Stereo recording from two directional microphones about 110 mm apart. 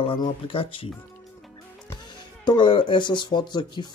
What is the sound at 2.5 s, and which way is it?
Speech, 45° left (ahead or behind).